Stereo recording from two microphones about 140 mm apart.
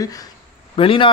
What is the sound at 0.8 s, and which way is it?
Speech, 40° left (ahead or behind).